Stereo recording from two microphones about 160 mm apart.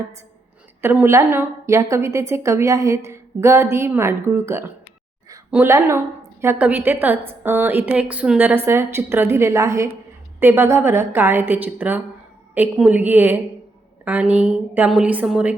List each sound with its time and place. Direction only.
0.8 s a woman's voice: 15° right (ahead or behind)